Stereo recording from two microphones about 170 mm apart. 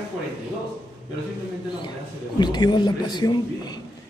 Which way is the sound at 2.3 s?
25° left (ahead or behind).